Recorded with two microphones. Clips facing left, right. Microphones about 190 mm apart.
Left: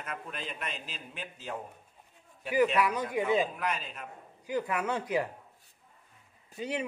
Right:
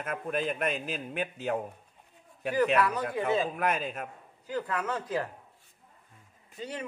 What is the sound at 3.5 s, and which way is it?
Speech, 50° right (ahead or behind).